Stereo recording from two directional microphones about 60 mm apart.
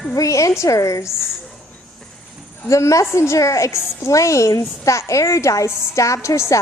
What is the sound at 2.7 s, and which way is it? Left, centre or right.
A woman's voice, left.